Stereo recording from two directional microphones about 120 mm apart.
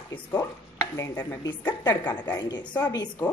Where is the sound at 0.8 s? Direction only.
30° left (ahead or behind).